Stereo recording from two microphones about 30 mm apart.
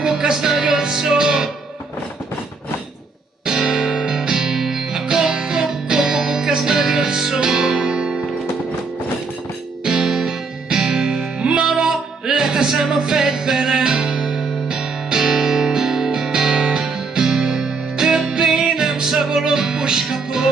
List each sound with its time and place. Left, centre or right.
0.0 s music: centre
3.4 s music: centre
9.8 s music: right
11.6 s music: centre